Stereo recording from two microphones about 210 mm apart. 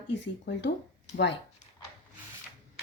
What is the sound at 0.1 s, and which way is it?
A woman's voice, 55° left (ahead or behind).